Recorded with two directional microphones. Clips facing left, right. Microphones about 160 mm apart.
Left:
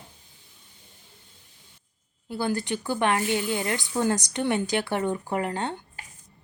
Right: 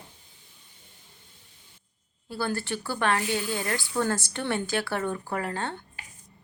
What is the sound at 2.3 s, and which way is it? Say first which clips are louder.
Speech: left 3 dB; 15° left (ahead or behind).